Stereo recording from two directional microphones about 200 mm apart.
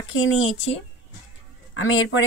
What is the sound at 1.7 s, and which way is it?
Speech, 80° left.